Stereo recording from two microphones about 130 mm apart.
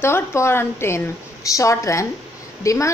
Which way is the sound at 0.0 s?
20° left (ahead or behind).